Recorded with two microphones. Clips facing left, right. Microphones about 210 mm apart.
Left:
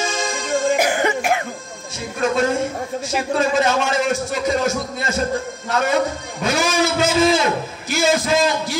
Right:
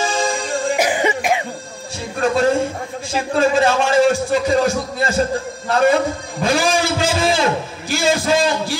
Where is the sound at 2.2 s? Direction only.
35° right (ahead or behind).